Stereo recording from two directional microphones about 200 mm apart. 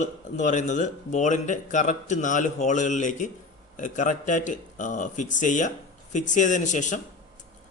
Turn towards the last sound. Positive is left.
turn(degrees=40)  # may be behind; listen again after turning